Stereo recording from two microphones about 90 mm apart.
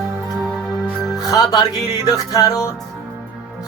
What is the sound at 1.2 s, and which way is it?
Music, 45° left (ahead or behind).